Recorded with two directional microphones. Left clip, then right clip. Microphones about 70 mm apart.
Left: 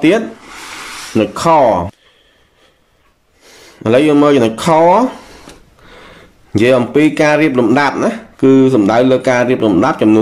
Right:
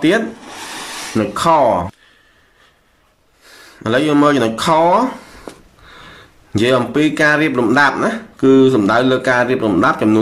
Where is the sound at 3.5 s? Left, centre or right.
Left.